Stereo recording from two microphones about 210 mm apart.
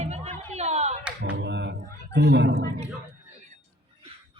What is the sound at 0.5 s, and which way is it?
Clapping, 30° right (ahead or behind).